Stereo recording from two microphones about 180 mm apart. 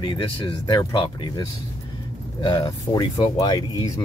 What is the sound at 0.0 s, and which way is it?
Speech, 25° left (ahead or behind).